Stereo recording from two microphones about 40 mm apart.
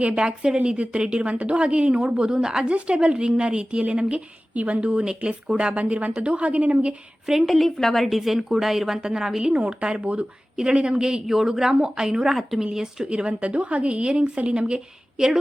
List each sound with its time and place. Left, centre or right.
0.2 s a woman's voice: right
2.6 s a woman's voice: right
5.8 s a woman's voice: right
7.3 s a woman's voice: centre
9.4 s a woman's voice: right
12.3 s a woman's voice: centre
13.1 s a woman's voice: right